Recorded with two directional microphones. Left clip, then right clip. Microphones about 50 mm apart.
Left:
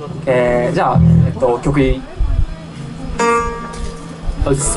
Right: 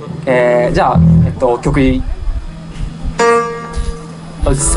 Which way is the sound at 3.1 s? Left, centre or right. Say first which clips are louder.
Right 4 dB; right.